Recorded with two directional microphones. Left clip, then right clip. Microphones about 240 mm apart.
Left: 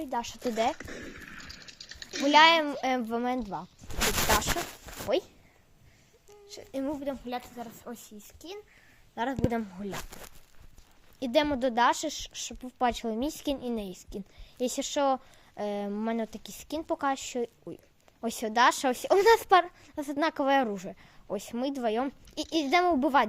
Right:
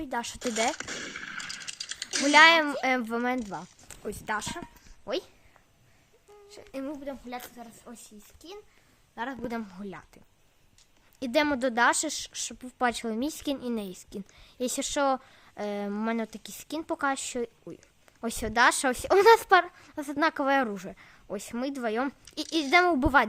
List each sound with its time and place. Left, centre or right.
0.0 s a woman's voice: centre
0.8 s a sound: right
2.3 s a woman's voice: centre
5.0 s a woman's voice: centre
6.5 s speech: centre
7.0 s a woman's voice: centre
9.5 s a woman's voice: centre
11.2 s a woman's voice: centre